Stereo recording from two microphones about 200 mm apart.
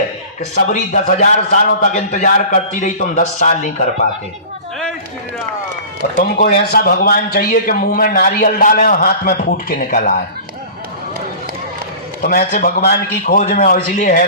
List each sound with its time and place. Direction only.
0.7 s a man's voice: 40° left (ahead or behind)
6.1 s a man's voice: 50° left (ahead or behind)
12.2 s a man's voice: 50° left (ahead or behind)